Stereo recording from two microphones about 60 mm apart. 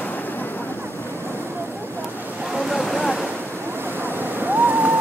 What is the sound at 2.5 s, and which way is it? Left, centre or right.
Waves, centre.